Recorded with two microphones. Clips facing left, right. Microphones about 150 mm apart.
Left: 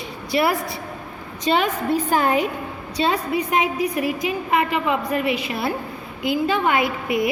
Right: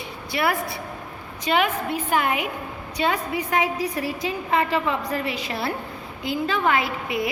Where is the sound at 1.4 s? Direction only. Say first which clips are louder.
Left 2 dB; 35° left (ahead or behind); by 4.6 s 15° left (ahead or behind).